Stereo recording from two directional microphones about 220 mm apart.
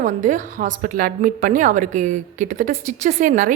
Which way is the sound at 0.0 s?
35° right (ahead or behind).